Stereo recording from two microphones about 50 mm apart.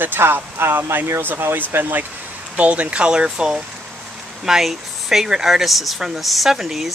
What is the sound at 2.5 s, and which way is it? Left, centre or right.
Speech, right.